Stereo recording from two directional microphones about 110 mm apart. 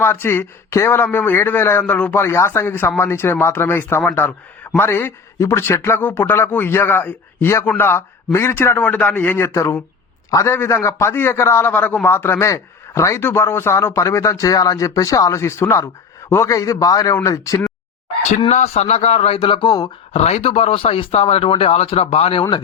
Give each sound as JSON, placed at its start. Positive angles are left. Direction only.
{"t": 0.0, "sound": "a man's voice", "side_deg": 20}
{"t": 18.5, "sound": "a man's voice", "side_deg": 75}
{"t": 20.1, "sound": "a man's voice", "side_deg": 75}